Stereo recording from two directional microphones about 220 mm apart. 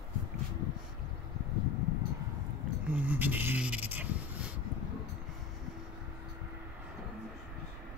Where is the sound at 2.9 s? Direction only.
5° right (ahead or behind).